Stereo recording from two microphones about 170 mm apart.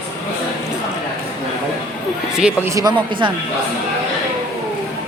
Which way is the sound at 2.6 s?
20° right (ahead or behind).